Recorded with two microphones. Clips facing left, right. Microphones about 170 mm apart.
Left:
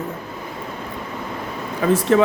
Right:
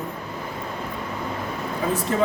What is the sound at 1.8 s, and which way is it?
Speech, 80° left.